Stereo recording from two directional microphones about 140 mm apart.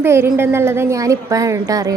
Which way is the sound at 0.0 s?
15° right (ahead or behind).